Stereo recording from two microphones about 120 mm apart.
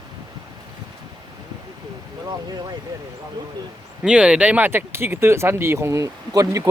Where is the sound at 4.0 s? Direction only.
10° right (ahead or behind).